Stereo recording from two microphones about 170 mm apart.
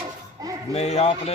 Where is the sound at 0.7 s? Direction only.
40° left (ahead or behind).